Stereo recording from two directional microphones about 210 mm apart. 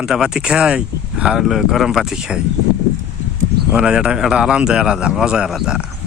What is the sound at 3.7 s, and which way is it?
Speech, 5° right (ahead or behind).